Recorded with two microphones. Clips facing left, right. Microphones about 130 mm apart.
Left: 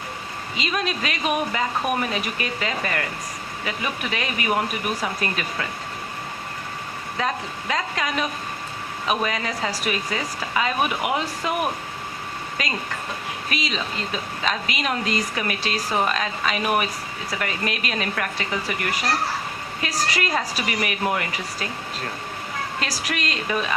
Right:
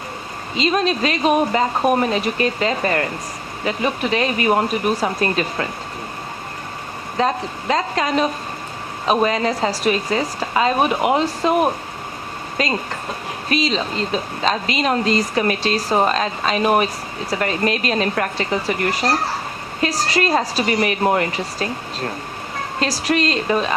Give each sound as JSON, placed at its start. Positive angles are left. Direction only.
{"t": 0.5, "sound": "speech", "side_deg": -30}
{"t": 7.2, "sound": "speech", "side_deg": -35}